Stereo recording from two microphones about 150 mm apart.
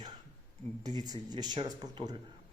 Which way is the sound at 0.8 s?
25° right (ahead or behind).